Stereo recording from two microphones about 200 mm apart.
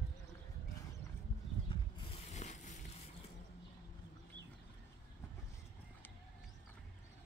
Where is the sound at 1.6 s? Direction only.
30° left (ahead or behind).